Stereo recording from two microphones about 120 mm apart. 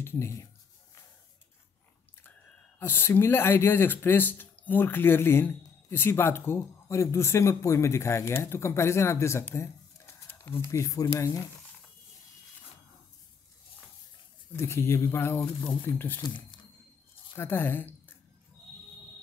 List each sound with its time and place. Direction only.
0.0 s speech: 20° left (ahead or behind)
2.8 s speech: 15° left (ahead or behind)
14.5 s speech: 20° left (ahead or behind)
17.4 s a woman's voice: 20° left (ahead or behind)